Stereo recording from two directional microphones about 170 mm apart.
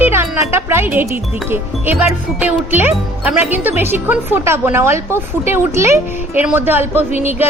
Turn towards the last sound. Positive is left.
turn(degrees=-10)  # may be behind; listen again after turning